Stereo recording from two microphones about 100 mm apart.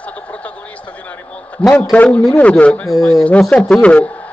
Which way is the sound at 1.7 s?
15° left (ahead or behind).